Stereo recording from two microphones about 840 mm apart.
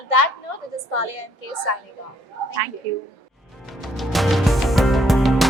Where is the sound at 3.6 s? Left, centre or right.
Centre.